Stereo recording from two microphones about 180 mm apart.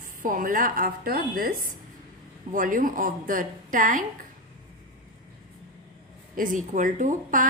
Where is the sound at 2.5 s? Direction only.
50° right (ahead or behind).